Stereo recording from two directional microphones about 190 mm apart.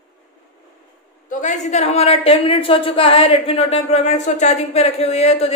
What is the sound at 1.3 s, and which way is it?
A woman's voice, 40° left (ahead or behind).